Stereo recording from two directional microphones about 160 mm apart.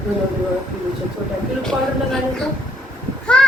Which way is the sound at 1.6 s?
5° left (ahead or behind).